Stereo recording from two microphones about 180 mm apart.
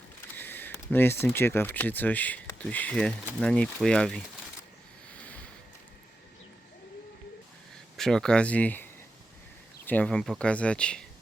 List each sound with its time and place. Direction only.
0.3 s speech: 10° left (ahead or behind)
7.9 s speech: centre (ahead or behind)